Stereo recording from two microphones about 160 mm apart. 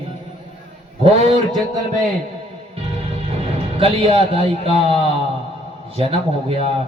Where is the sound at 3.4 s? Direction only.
35° right (ahead or behind).